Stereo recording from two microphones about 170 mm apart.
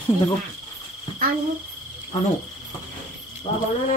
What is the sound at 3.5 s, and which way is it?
Cricket, 30° left (ahead or behind).